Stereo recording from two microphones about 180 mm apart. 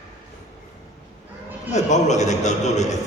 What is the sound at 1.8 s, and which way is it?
A man's voice, 40° left (ahead or behind).